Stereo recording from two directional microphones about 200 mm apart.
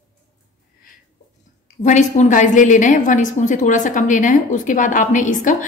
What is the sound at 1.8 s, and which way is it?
A woman's voice, 35° left (ahead or behind).